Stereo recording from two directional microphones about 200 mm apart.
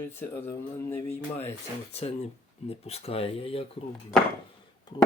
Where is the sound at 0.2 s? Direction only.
10° left (ahead or behind).